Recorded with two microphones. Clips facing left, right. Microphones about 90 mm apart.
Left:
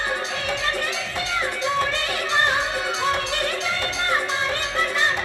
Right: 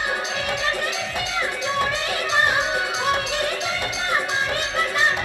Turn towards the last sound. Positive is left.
turn(degrees=-15)  # may be behind; listen again after turning